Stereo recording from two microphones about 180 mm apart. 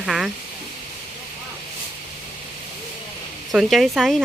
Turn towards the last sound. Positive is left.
turn(degrees=0)  # may be behind; listen again after turning